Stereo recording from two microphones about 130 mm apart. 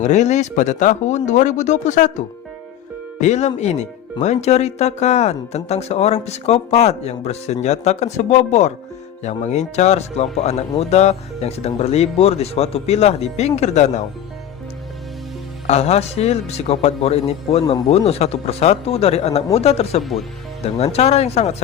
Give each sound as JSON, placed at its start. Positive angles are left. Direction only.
{"t": 0.0, "sound": "speech", "side_deg": 65}
{"t": 15.6, "sound": "a man's voice", "side_deg": 55}
{"t": 20.0, "sound": "speech", "side_deg": 0}
{"t": 20.7, "sound": "a man's voice", "side_deg": 55}